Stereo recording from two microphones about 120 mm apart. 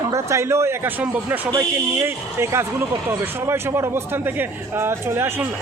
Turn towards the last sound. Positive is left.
turn(degrees=-20)  # may be behind; listen again after turning